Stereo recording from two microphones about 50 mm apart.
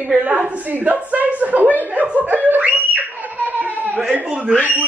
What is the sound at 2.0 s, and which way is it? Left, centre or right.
Laughter, right.